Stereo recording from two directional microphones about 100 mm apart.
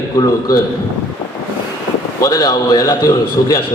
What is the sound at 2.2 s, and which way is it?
A man's voice, 35° left (ahead or behind).